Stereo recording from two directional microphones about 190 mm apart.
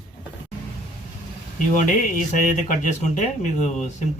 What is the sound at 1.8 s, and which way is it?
Speech, 45° left (ahead or behind).